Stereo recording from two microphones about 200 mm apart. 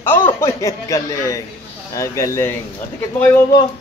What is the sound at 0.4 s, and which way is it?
A man's voice, 15° left (ahead or behind).